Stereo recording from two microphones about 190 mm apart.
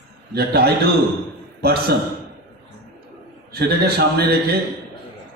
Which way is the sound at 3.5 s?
55° right (ahead or behind).